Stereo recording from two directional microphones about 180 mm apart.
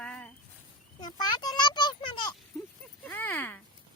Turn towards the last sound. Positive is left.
turn(degrees=10)  # may be behind; listen again after turning